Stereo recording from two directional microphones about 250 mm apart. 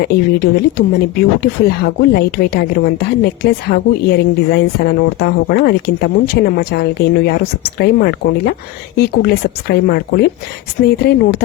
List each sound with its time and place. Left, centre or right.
0.0 s speech: left
9.0 s speech: left